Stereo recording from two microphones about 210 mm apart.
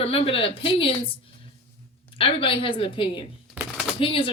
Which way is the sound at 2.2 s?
25° left (ahead or behind).